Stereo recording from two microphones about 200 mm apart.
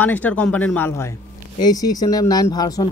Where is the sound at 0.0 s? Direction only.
10° left (ahead or behind).